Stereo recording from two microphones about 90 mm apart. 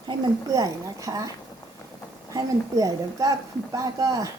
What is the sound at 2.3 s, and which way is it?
A woman's voice, 40° right (ahead or behind).